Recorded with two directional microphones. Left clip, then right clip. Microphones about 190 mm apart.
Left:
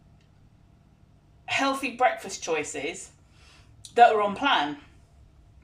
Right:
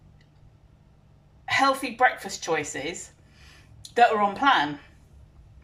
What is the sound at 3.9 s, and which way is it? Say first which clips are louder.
Speech: left 1 dB; 15° left (ahead or behind).